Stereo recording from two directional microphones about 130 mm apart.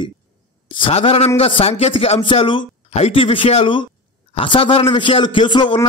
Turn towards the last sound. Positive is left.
turn(degrees=40)  # may be behind; listen again after turning